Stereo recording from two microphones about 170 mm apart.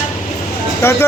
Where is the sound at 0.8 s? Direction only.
15° left (ahead or behind).